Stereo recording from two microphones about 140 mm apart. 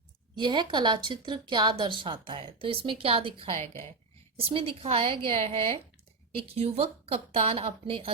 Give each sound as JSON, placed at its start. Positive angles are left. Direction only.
{"t": 0.3, "sound": "a woman's voice", "side_deg": -30}